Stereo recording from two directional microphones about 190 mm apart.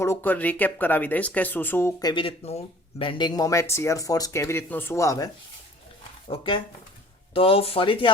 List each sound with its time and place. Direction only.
0.0 s speech: 10° left (ahead or behind); by 8.1 s 25° left (ahead or behind)